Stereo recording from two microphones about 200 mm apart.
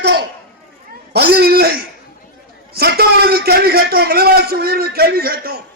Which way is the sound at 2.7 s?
50° right (ahead or behind).